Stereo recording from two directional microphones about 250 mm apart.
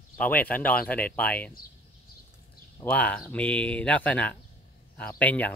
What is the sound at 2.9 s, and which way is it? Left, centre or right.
Speech, centre.